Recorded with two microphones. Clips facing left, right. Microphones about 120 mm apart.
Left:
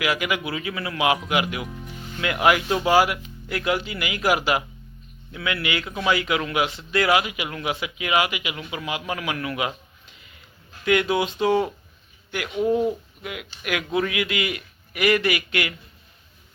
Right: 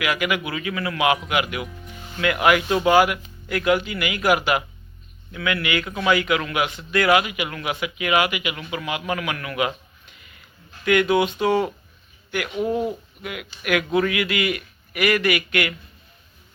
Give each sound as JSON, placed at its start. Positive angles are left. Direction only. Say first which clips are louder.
{"t": 0.0, "sound": "a man's voice", "louder": "right 1 dB", "side_deg": 30}
{"t": 13.2, "sound": "a man's voice", "louder": "right 3 dB", "side_deg": 20}